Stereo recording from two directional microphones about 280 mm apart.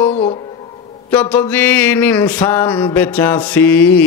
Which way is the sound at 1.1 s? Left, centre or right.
Centre.